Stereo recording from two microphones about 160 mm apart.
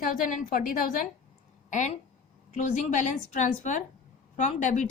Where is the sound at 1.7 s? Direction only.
50° left (ahead or behind).